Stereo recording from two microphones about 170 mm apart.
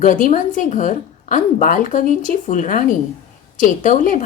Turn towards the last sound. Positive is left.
turn(degrees=50)  # may be behind; listen again after turning